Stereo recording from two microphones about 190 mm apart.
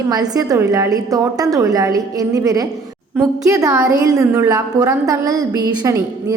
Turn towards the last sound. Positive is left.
turn(degrees=-20)  # may be behind; listen again after turning